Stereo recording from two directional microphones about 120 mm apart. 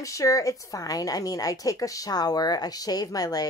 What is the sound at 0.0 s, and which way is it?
A woman's voice, 25° left (ahead or behind).